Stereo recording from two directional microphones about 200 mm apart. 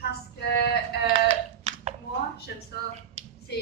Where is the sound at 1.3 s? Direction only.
35° right (ahead or behind).